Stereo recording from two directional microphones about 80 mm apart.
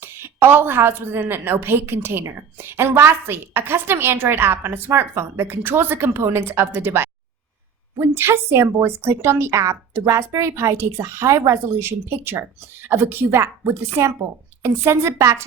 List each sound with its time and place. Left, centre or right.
0.0 s a woman's voice: right